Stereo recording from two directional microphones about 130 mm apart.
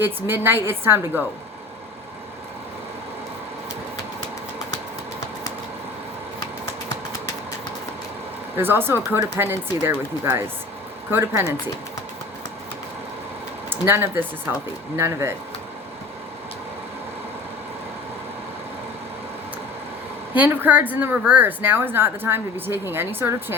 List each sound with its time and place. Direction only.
0.0 s a woman's voice: 15° right (ahead or behind)
8.5 s a woman's voice: 15° right (ahead or behind)
13.7 s speech: 20° right (ahead or behind)
20.3 s a woman's voice: 15° right (ahead or behind)